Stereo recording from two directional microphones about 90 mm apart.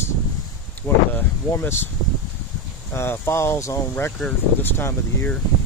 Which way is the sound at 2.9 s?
30° left (ahead or behind).